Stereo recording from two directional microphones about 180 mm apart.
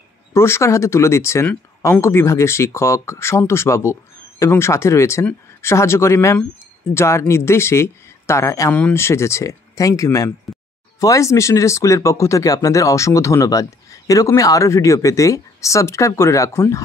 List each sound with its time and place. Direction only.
0.3 s speech: 15° left (ahead or behind)